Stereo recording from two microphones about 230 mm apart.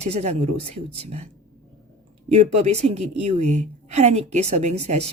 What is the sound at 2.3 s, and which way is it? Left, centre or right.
A woman's voice, right.